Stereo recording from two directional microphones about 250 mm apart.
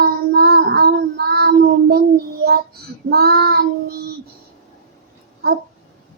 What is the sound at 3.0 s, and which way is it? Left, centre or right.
Child singing, right.